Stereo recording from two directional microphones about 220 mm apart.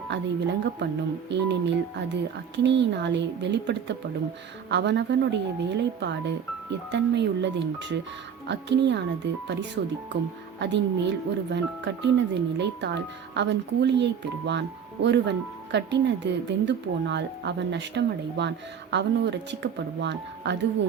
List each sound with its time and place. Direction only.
0.1 s speech: 55° right (ahead or behind)
10.1 s speech: 50° right (ahead or behind)